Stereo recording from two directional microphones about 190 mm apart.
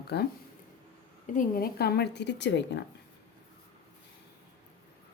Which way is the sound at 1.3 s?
50° left (ahead or behind).